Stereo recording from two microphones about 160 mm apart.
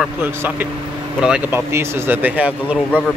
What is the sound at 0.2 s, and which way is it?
Speech, 15° right (ahead or behind).